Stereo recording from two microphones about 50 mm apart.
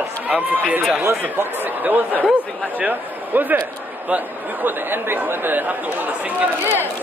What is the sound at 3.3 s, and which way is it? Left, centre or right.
Speech, right.